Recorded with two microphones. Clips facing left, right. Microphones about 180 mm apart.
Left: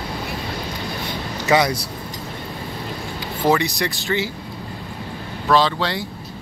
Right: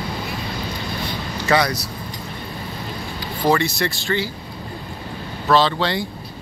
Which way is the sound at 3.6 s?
15° left (ahead or behind).